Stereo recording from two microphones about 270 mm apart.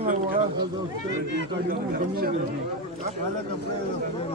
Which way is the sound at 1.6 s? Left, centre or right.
Right.